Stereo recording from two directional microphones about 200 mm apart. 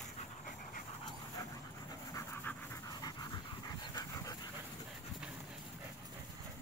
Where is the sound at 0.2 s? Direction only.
40° left (ahead or behind).